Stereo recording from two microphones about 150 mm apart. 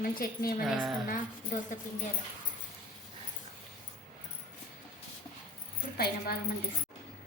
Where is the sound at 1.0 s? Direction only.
60° left (ahead or behind).